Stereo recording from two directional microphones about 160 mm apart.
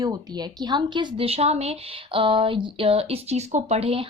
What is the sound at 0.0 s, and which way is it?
A woman's voice, 25° right (ahead or behind).